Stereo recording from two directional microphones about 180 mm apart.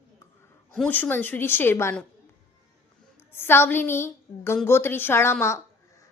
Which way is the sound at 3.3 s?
10° left (ahead or behind).